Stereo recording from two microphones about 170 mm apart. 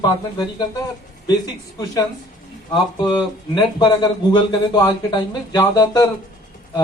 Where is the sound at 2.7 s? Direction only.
25° left (ahead or behind).